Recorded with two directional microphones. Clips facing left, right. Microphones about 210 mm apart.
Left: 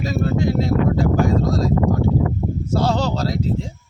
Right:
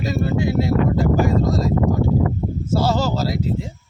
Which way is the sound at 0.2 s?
5° right (ahead or behind).